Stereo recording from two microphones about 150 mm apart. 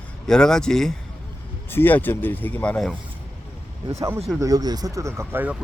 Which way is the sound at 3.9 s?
20° right (ahead or behind).